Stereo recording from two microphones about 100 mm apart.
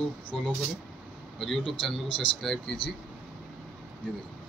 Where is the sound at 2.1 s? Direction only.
60° left (ahead or behind).